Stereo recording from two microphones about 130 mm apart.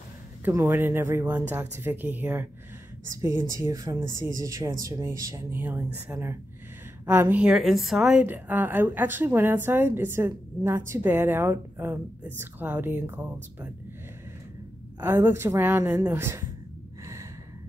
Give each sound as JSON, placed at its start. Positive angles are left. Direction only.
{"t": 0.5, "sound": "a woman's voice", "side_deg": -20}
{"t": 15.0, "sound": "a woman's voice", "side_deg": -15}
{"t": 17.0, "sound": "gasp", "side_deg": -25}